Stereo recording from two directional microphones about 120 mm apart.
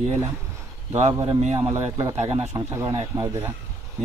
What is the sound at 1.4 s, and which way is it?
Speech, 65° right (ahead or behind).